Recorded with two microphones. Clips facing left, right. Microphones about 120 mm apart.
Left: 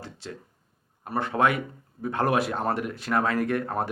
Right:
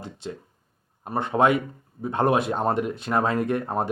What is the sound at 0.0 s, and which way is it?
Speech, 20° right (ahead or behind).